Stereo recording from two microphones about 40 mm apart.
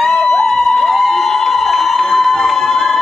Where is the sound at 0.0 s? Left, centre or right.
Centre.